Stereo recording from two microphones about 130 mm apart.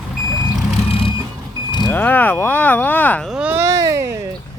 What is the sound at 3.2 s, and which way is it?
Speech, 5° right (ahead or behind).